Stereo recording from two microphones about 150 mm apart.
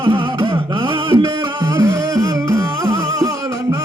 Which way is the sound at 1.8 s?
20° right (ahead or behind).